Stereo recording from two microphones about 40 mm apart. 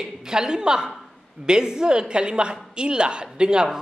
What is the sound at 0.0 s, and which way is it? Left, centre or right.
A woman's voice, centre.